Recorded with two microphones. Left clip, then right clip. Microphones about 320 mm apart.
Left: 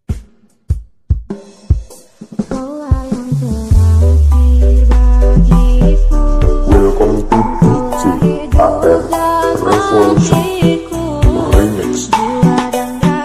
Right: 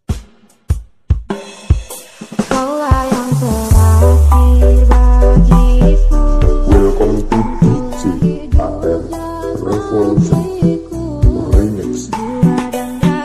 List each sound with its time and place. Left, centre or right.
2.3 s music: right; by 13.2 s centre